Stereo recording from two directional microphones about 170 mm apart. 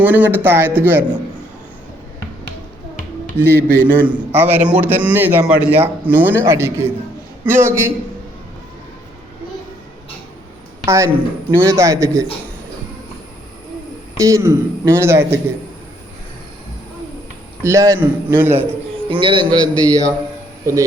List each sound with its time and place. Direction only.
0.0 s a man's voice: 10° right (ahead or behind)
3.3 s a man's voice: 15° right (ahead or behind)
10.8 s a woman's voice: 15° right (ahead or behind)
14.2 s a man's voice: 15° right (ahead or behind)
17.6 s a man's voice: 15° right (ahead or behind)
19.0 s a man's voice: 30° right (ahead or behind)